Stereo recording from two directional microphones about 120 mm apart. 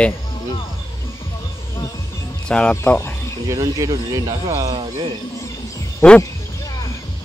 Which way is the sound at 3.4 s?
30° right (ahead or behind).